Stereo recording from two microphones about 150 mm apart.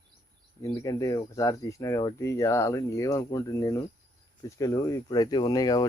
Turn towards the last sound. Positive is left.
turn(degrees=25)  # may be behind; listen again after turning